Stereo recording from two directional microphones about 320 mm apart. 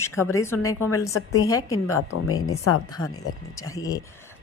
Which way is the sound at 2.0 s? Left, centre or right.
Left.